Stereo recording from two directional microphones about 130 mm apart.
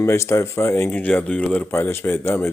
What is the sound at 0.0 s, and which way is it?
Speech, 20° left (ahead or behind).